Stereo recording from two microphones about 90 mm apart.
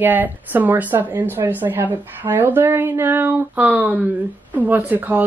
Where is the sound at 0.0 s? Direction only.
20° right (ahead or behind).